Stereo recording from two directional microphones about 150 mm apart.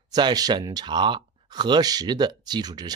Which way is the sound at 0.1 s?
25° right (ahead or behind).